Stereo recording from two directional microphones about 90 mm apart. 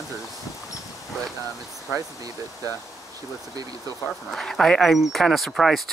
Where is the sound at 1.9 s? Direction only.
35° right (ahead or behind).